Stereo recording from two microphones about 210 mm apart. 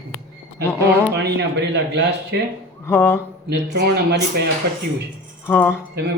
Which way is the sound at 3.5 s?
50° right (ahead or behind).